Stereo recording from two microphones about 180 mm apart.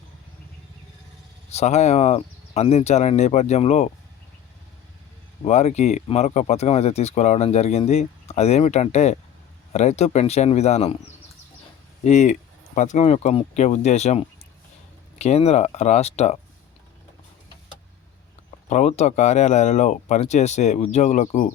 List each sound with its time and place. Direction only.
1.5 s speech: 40° left (ahead or behind)
5.5 s speech: 40° left (ahead or behind)
12.0 s speech: 40° left (ahead or behind)
18.7 s speech: 40° left (ahead or behind)